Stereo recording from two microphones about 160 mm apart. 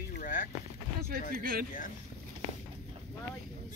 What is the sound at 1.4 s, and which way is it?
Speech, 65° right (ahead or behind).